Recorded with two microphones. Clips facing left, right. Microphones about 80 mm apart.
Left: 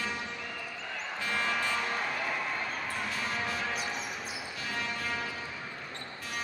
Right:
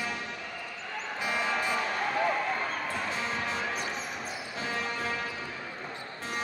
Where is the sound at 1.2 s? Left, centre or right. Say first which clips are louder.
Right 2 dB; centre.